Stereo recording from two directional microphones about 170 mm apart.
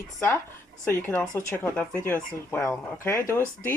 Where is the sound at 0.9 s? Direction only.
15° left (ahead or behind).